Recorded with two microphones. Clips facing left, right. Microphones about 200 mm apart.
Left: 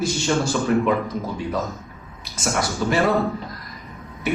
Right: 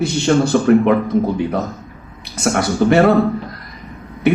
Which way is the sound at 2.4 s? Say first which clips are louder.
Right 8 dB; 60° right (ahead or behind).